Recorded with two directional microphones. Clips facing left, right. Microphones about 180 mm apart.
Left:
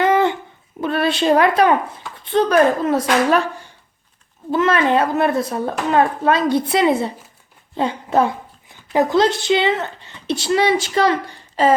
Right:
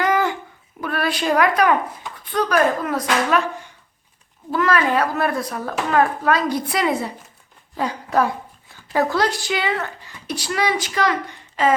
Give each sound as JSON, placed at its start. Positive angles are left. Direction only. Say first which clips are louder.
{"t": 0.0, "sound": "babbling", "louder": "left 4 dB", "side_deg": 25}
{"t": 0.8, "sound": "a woman's voice", "louder": "left 5 dB", "side_deg": 25}
{"t": 4.5, "sound": "speech", "louder": "left 3 dB", "side_deg": 25}